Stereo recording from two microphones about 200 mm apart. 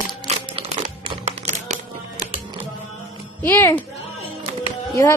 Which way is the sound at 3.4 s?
10° left (ahead or behind).